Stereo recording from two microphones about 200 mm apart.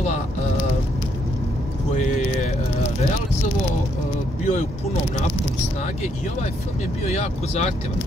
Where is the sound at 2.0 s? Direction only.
35° left (ahead or behind).